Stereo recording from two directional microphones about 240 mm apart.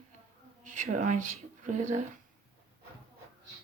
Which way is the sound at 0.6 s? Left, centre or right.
Right.